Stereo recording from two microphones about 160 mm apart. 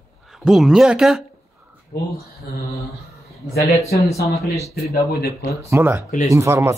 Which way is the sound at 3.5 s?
75° left (ahead or behind).